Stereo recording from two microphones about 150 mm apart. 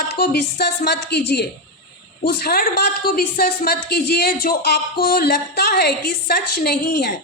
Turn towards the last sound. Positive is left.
turn(degrees=90)